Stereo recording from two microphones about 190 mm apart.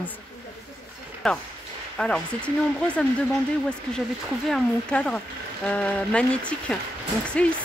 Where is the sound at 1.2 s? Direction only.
Centre (ahead or behind).